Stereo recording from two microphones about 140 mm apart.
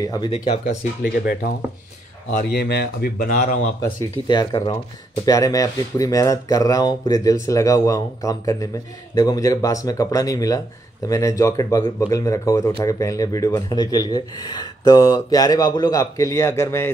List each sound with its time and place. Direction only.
0.0 s speech: 25° left (ahead or behind)
0.3 s speech: 45° left (ahead or behind)
1.2 s dishes: 90° left
2.3 s a man's voice: 85° left; by 3.5 s 65° left (ahead or behind)
4.3 s speech: 30° left (ahead or behind)